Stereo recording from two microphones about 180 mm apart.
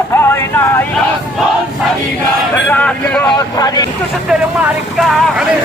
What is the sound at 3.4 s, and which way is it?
Speech, 20° left (ahead or behind).